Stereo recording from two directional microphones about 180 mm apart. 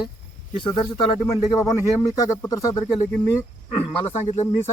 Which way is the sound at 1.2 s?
15° left (ahead or behind).